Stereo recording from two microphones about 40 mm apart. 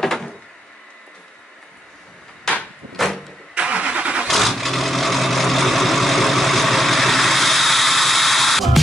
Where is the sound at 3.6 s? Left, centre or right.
Right.